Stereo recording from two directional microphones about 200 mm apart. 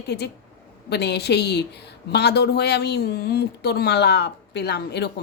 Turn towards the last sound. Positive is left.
turn(degrees=55)  # may be behind; listen again after turning